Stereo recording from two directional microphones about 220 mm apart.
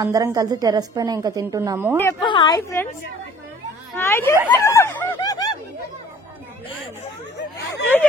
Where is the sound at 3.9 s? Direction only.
10° left (ahead or behind).